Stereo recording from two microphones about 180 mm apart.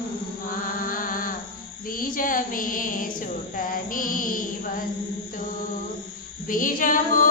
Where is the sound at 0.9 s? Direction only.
50° left (ahead or behind).